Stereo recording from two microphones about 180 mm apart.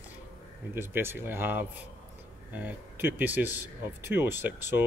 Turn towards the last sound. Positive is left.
turn(degrees=-10)  # may be behind; listen again after turning